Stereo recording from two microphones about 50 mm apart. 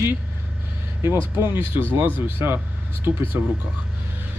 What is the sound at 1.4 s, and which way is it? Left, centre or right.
Speech, right.